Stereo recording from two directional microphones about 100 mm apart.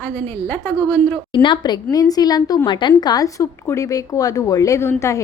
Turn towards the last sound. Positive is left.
turn(degrees=25)  # may be behind; listen again after turning